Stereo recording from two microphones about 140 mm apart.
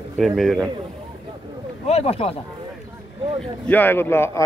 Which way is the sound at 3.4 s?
10° left (ahead or behind).